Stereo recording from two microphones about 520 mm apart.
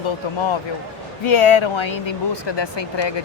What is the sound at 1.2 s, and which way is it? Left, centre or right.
Speech, left.